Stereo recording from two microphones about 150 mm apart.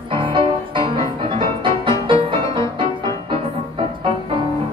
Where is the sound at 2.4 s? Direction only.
20° left (ahead or behind).